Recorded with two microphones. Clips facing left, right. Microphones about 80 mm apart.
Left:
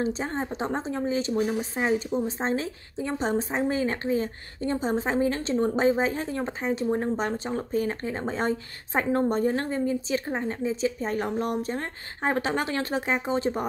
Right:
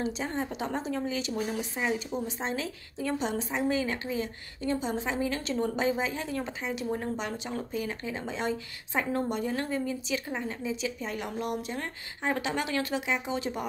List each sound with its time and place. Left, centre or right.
0.0 s a woman's voice: left